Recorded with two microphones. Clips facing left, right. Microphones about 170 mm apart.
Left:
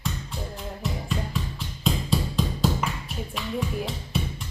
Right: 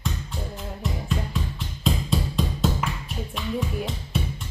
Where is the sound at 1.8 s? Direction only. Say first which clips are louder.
Even; centre (ahead or behind).